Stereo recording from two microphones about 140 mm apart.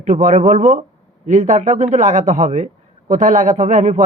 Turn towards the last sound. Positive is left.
turn(degrees=-60)  # may be behind; listen again after turning